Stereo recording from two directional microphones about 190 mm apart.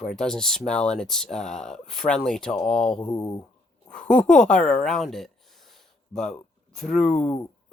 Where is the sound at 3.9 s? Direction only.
5° left (ahead or behind).